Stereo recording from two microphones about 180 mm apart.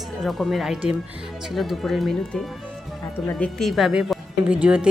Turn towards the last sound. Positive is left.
turn(degrees=-5)  # may be behind; listen again after turning